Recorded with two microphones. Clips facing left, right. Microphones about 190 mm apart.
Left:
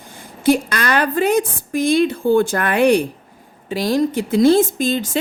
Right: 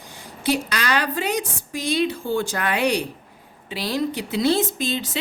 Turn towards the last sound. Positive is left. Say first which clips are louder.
# left 7 dB
turn(degrees=50)  # may be behind; listen again after turning